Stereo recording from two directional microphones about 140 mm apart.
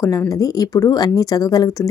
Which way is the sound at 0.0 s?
25° left (ahead or behind).